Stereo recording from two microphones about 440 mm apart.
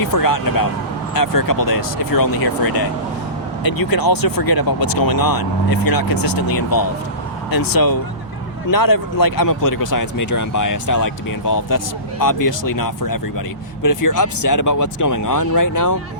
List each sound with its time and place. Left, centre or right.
0.0 s speech: left